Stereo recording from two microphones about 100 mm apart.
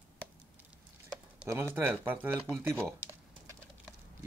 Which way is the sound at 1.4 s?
25° right (ahead or behind).